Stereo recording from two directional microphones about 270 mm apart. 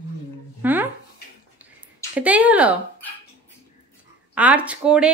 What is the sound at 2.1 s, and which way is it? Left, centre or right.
Speech, centre.